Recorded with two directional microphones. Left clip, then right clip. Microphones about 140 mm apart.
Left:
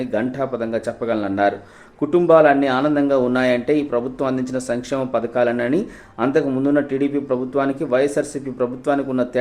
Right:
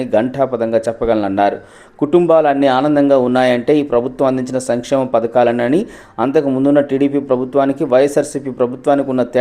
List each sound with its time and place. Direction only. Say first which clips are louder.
0.1 s a man's voice: right 10 dB; 30° right (ahead or behind)